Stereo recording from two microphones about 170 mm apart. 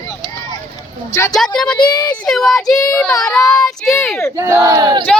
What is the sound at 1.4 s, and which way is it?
Speech, 5° left (ahead or behind).